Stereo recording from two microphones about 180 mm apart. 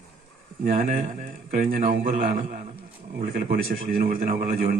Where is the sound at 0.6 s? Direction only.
50° right (ahead or behind).